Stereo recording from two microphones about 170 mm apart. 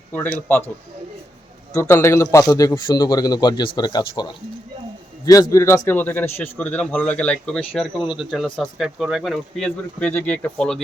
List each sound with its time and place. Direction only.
0.1 s a man's voice: 10° left (ahead or behind)
1.7 s a man's voice: 15° left (ahead or behind)